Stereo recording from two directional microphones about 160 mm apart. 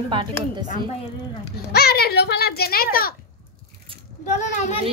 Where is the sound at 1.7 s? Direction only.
80° left.